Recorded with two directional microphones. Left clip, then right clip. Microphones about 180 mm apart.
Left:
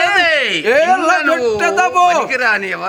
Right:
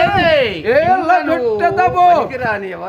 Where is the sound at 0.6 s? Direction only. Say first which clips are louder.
Left 1 dB; 15° left (ahead or behind).